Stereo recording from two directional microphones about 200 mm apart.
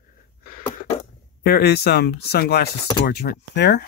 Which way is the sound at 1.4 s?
55° left (ahead or behind).